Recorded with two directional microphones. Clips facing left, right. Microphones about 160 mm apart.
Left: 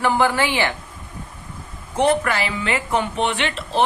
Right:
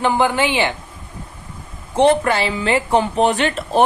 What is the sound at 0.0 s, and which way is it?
Speech, 20° right (ahead or behind).